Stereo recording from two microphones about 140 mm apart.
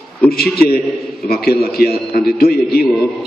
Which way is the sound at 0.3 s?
90° left.